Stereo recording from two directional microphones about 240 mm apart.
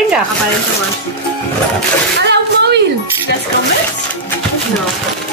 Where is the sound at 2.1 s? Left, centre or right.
Right.